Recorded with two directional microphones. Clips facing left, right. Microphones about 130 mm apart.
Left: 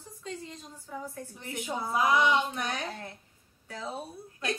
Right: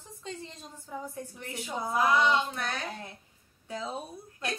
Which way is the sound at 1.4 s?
20° left (ahead or behind).